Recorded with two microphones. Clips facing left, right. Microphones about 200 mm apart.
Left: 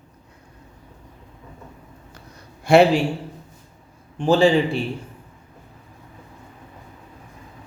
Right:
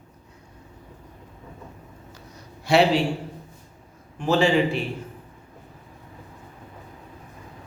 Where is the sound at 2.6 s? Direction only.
50° left (ahead or behind).